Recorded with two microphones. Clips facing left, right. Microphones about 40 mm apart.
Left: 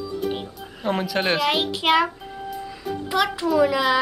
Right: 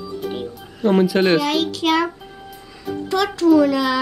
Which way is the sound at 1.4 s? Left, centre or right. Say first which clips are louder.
Right 1 dB; centre.